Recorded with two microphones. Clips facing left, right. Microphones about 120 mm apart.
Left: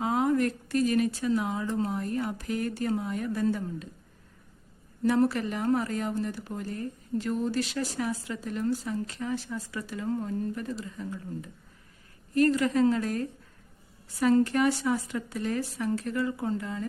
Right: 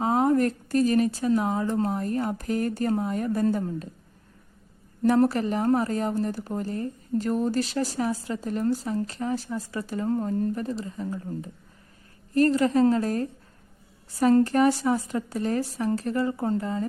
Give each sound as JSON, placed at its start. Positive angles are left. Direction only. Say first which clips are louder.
{"t": 0.0, "sound": "a woman's voice", "louder": "right 4 dB", "side_deg": -40}
{"t": 5.0, "sound": "a woman's voice", "louder": "right 4 dB", "side_deg": -45}